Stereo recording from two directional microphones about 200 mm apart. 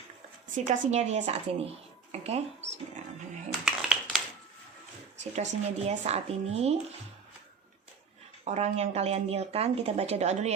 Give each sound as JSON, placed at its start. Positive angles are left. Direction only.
{"t": 0.5, "sound": "speech", "side_deg": -35}
{"t": 3.7, "sound": "a sound", "side_deg": 0}
{"t": 5.2, "sound": "speech", "side_deg": -35}
{"t": 8.4, "sound": "speech", "side_deg": -30}